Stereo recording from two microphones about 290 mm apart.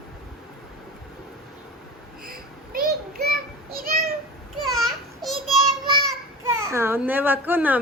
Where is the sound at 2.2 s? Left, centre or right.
Right.